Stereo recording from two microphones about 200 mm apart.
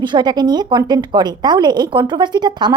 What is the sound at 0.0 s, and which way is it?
A woman's voice, 20° right (ahead or behind).